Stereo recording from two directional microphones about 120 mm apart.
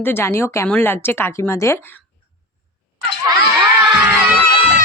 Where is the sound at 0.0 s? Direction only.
20° left (ahead or behind).